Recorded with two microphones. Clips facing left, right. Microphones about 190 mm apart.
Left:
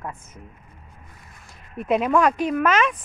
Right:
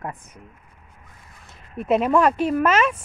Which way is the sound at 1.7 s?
Centre (ahead or behind).